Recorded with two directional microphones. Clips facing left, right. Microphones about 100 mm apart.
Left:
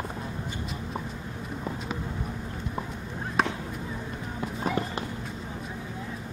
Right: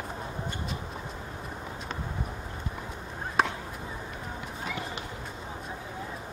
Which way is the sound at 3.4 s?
Centre (ahead or behind).